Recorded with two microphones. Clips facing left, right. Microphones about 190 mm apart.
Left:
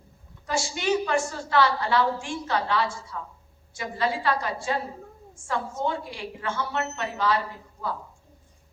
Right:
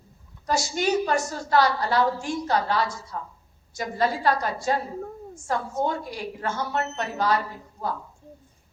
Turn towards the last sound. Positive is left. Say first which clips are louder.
# right 2 dB
turn(degrees=-40)  # may be behind; listen again after turning